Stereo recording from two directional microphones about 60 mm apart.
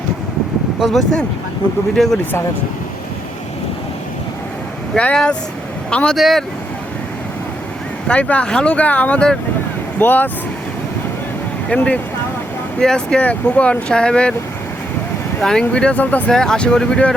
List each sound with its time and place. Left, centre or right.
2.0 s speech: centre
4.9 s speech: centre
6.1 s speech: centre
8.0 s speech: left
11.7 s speech: left
15.4 s speech: centre
16.0 s speech: left
16.3 s speech: centre